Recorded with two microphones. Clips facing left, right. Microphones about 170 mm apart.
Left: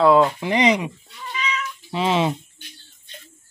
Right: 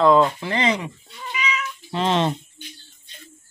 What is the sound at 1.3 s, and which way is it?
Cat, 10° right (ahead or behind).